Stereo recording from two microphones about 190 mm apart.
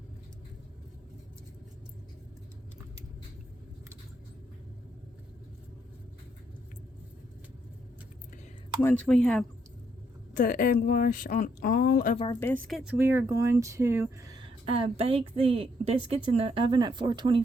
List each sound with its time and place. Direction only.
8.8 s speech: 10° left (ahead or behind)
10.3 s speech: 50° left (ahead or behind)
12.3 s speech: 10° left (ahead or behind); by 14.3 s 15° right (ahead or behind)
14.6 s a woman's voice: 30° right (ahead or behind)